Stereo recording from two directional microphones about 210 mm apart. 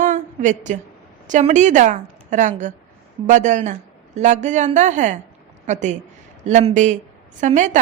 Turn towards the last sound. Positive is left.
turn(degrees=-35)  # may be behind; listen again after turning